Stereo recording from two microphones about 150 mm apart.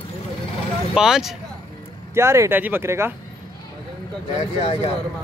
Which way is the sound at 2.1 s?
20° right (ahead or behind).